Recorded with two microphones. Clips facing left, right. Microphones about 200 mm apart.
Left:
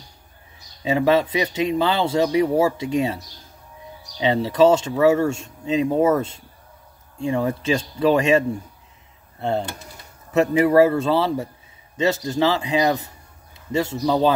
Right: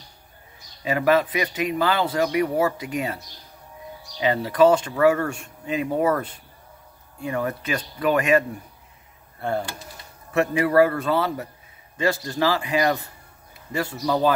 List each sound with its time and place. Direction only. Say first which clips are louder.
0.8 s speech: left 2 dB; 25° left (ahead or behind)
4.2 s speech: left 1 dB; 25° left (ahead or behind)